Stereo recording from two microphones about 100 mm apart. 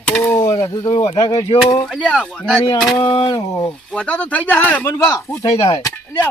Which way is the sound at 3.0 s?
55° left (ahead or behind).